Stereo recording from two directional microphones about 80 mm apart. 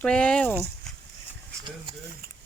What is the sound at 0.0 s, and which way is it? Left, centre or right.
Speech, centre.